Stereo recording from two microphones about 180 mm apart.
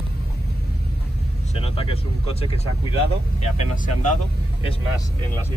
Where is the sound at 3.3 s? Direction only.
40° left (ahead or behind).